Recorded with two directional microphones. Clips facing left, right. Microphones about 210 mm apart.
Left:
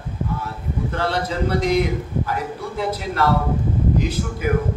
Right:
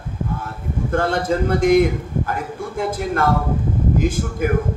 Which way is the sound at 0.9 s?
50° right (ahead or behind).